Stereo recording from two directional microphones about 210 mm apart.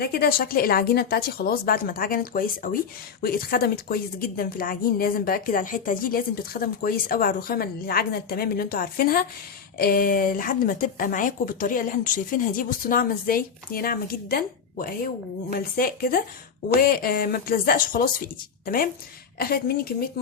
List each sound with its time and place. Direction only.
0.0 s a woman's voice: 45° left (ahead or behind)